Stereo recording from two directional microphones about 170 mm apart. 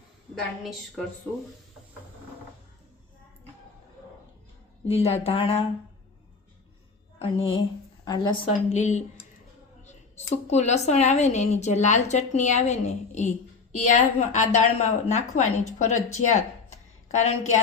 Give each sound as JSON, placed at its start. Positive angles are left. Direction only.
{"t": 0.6, "sound": "a woman's voice", "side_deg": 0}
{"t": 4.9, "sound": "speech", "side_deg": 35}
{"t": 7.2, "sound": "a woman's voice", "side_deg": 35}
{"t": 8.7, "sound": "a woman's voice", "side_deg": 40}